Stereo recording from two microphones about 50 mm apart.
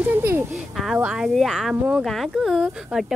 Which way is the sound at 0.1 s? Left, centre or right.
Right.